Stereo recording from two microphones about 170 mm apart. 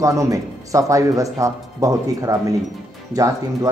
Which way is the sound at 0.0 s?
20° right (ahead or behind).